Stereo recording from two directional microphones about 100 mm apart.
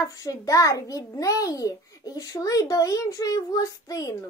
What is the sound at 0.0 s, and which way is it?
A child's voice, 35° left (ahead or behind).